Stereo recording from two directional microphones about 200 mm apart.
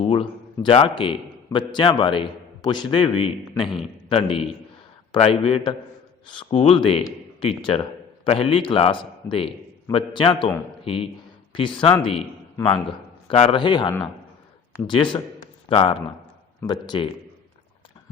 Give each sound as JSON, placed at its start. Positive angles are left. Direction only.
{"t": 0.0, "sound": "a man's voice", "side_deg": 25}
{"t": 13.2, "sound": "a man's voice", "side_deg": 30}